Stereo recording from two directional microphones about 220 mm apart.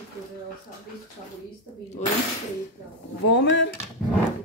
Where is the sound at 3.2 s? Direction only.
55° left (ahead or behind).